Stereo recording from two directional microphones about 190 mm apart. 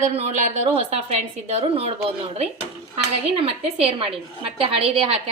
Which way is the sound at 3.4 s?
30° right (ahead or behind).